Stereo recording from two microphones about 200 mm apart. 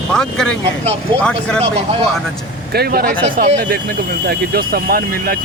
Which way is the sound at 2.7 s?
50° right (ahead or behind).